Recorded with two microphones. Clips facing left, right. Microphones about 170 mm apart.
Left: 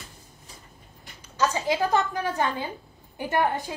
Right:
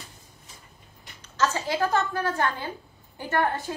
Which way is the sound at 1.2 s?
15° left (ahead or behind).